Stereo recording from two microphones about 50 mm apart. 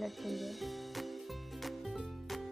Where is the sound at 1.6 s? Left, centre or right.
Centre.